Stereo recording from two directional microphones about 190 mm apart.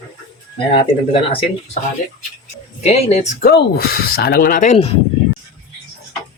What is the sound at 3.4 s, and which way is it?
Speech, 55° left (ahead or behind).